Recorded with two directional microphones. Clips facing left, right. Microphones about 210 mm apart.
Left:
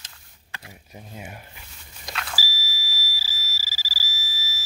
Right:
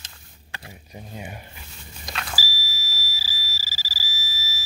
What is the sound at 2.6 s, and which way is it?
Fire alarm, 10° left (ahead or behind).